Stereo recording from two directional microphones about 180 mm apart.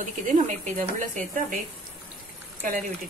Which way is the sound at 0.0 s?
45° right (ahead or behind).